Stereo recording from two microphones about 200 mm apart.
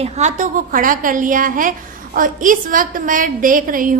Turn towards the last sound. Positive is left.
turn(degrees=-45)  # may be behind; listen again after turning